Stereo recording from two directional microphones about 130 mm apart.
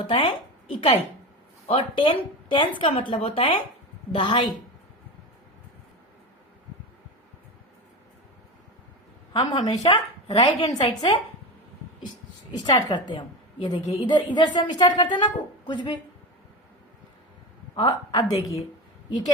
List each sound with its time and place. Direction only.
0.1 s a woman's voice: 40° left (ahead or behind)
9.3 s a woman's voice: 35° left (ahead or behind)
10.6 s a woman's voice: 50° left (ahead or behind)
12.7 s a woman's voice: 35° left (ahead or behind)
17.7 s a woman's voice: 35° left (ahead or behind)